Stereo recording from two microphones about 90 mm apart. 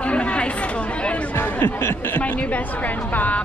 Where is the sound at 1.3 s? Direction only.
25° left (ahead or behind).